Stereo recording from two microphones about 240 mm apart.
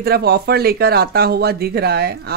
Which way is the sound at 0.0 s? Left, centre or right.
Right.